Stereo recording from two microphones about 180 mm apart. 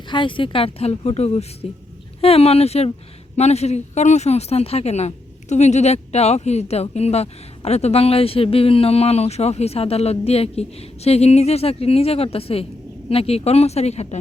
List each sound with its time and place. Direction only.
0.1 s speech: 30° left (ahead or behind)